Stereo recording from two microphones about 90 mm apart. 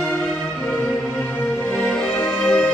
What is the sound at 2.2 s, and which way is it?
Music, 10° left (ahead or behind).